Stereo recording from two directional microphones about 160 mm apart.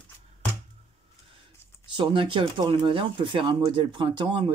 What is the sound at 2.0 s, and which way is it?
Speech, 30° right (ahead or behind).